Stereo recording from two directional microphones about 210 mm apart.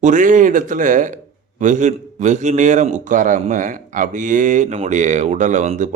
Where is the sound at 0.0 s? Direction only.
35° right (ahead or behind).